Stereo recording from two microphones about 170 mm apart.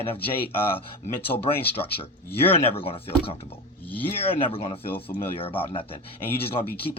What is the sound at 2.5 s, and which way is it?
Speech, 35° left (ahead or behind).